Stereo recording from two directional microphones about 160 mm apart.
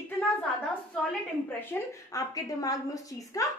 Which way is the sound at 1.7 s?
15° left (ahead or behind).